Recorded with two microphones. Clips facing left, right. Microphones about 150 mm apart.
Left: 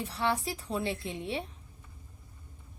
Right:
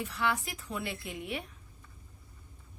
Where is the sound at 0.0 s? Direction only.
35° left (ahead or behind).